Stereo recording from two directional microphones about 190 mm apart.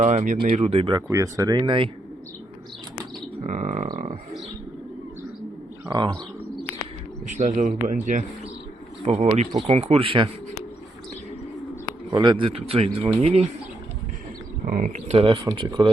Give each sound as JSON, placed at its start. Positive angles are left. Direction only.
{"t": 0.0, "sound": "speech", "side_deg": -40}
{"t": 3.4, "sound": "a sound", "side_deg": -40}
{"t": 7.3, "sound": "speech", "side_deg": -40}
{"t": 12.1, "sound": "speech", "side_deg": -25}
{"t": 14.6, "sound": "speech", "side_deg": -45}